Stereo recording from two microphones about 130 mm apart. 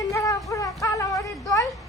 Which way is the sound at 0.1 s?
25° left (ahead or behind).